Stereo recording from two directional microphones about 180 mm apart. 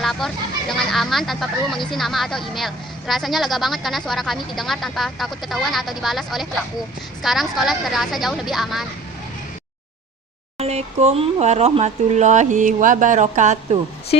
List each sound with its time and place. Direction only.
0.0 s a sound: centre (ahead or behind)
0.8 s a woman's voice: centre (ahead or behind)
10.6 s speech: 35° right (ahead or behind)